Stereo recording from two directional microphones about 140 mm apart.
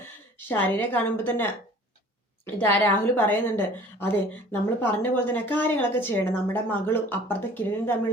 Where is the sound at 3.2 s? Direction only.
15° left (ahead or behind).